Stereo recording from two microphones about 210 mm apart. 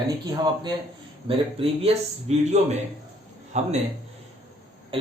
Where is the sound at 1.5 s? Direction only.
30° right (ahead or behind).